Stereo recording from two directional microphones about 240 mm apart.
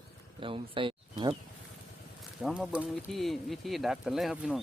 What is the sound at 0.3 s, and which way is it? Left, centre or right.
Speech, right.